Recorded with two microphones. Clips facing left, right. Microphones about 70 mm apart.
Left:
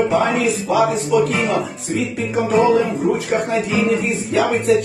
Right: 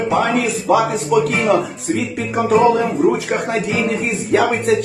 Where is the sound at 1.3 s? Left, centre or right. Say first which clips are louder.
Right 3 dB; right.